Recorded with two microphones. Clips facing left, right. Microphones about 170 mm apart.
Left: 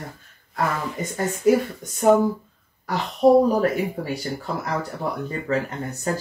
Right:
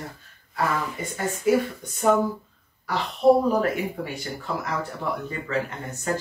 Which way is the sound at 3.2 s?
40° left (ahead or behind).